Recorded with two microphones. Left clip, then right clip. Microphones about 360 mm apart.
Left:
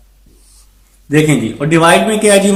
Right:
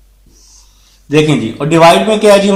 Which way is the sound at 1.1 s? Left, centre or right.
Centre.